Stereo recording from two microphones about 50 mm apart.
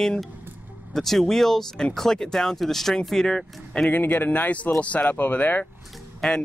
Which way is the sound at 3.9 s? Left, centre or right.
Left.